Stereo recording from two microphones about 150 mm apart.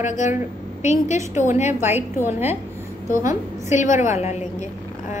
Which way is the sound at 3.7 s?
55° left (ahead or behind).